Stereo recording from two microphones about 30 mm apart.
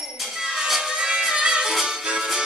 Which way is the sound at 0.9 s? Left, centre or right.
Right.